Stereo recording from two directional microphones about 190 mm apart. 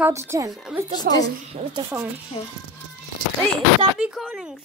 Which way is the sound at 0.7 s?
5° right (ahead or behind).